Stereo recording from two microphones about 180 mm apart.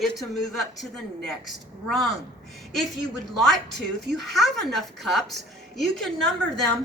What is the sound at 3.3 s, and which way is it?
A man's voice, centre (ahead or behind).